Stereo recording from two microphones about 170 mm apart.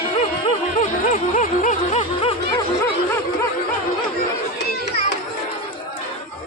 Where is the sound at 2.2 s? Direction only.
35° left (ahead or behind).